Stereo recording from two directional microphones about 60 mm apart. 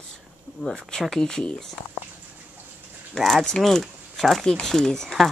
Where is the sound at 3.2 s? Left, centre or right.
Centre.